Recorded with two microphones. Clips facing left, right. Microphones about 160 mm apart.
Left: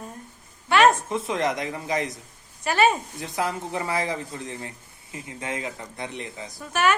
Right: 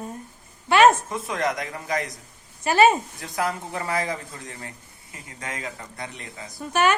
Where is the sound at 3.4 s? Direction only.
20° left (ahead or behind).